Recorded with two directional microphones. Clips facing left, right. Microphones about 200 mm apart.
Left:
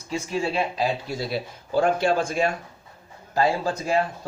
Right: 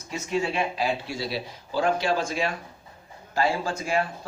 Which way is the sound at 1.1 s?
50° left (ahead or behind).